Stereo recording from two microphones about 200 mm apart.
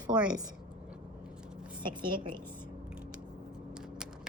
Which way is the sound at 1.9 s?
25° right (ahead or behind).